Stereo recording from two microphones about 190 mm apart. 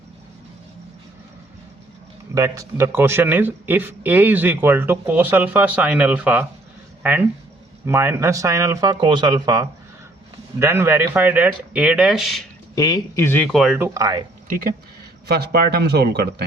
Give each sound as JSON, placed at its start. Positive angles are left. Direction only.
{"t": 2.3, "sound": "speech", "side_deg": -15}
{"t": 12.7, "sound": "speech", "side_deg": 20}
{"t": 13.5, "sound": "speech", "side_deg": 0}
{"t": 13.7, "sound": "speech", "side_deg": -15}
{"t": 15.3, "sound": "speech", "side_deg": -55}